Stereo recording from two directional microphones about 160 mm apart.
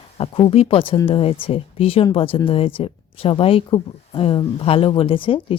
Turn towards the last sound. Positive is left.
turn(degrees=35)  # may be behind; listen again after turning